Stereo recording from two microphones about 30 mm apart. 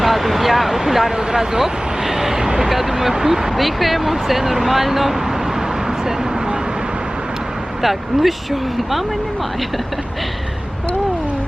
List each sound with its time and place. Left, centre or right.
0.0 s a sound: centre
1.1 s speech: centre
3.5 s speech: centre
7.8 s speech: centre